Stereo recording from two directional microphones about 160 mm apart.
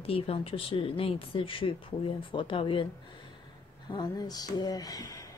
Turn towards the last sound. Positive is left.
turn(degrees=20)  # may be behind; listen again after turning